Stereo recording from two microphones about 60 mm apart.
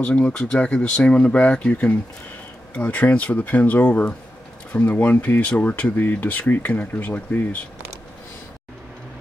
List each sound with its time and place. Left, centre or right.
0.0 s speech: centre